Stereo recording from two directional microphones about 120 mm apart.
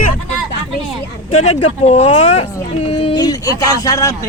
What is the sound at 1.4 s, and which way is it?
Speech, 60° left (ahead or behind).